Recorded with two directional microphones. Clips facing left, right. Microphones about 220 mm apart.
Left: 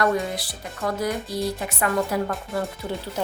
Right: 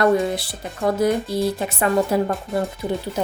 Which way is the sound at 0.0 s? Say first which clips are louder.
Right 5 dB; 25° right (ahead or behind).